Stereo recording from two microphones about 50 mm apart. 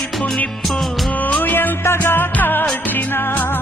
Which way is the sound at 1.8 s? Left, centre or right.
Left.